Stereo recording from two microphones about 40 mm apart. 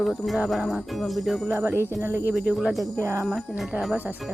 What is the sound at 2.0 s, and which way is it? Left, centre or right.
Speech, right.